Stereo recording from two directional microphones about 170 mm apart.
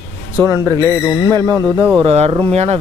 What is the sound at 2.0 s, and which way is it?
Speech, 35° right (ahead or behind).